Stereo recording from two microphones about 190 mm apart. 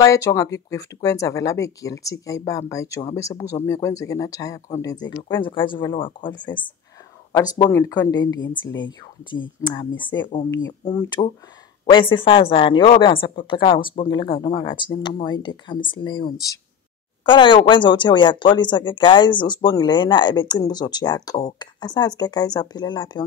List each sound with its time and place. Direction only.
0.0 s speech: 15° left (ahead or behind)